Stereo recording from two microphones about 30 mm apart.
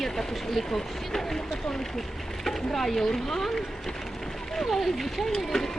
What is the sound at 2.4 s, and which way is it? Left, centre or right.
Speech, centre.